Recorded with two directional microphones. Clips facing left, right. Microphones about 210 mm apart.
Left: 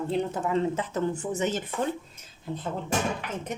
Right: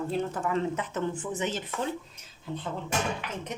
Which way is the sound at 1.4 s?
45° left (ahead or behind).